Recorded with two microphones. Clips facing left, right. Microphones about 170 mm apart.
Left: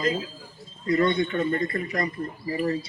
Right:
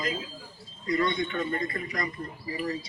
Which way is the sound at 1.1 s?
30° left (ahead or behind).